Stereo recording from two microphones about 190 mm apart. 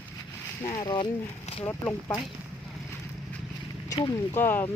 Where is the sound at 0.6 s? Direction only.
20° left (ahead or behind).